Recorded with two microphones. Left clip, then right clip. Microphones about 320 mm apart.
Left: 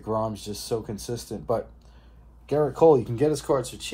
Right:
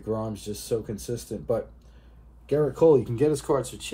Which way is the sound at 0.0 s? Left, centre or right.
Left.